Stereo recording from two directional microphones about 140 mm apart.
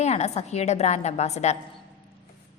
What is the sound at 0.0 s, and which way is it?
A woman's voice, 50° left (ahead or behind).